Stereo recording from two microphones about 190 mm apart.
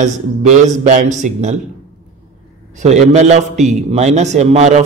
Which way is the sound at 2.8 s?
35° right (ahead or behind).